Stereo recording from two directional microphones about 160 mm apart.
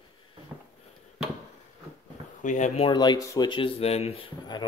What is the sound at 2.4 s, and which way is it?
Speech, 50° left (ahead or behind).